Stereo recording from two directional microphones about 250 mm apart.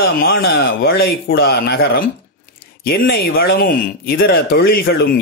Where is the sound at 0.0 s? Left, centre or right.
Left.